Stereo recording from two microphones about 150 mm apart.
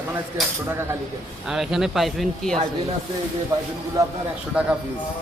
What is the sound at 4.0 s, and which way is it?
Speech, 20° right (ahead or behind).